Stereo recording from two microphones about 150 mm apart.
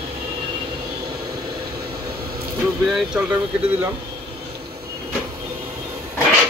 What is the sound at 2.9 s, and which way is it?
Speech, 5° right (ahead or behind).